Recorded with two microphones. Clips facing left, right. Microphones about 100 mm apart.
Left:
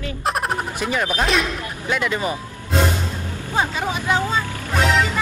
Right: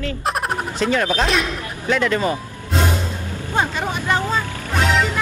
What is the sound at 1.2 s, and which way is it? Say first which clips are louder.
Music: right 1 dB; centre (ahead or behind).